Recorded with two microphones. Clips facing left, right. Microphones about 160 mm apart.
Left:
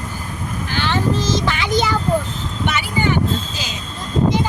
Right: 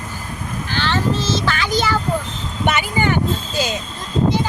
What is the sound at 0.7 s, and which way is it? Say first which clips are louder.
Speech: even; 15° left (ahead or behind).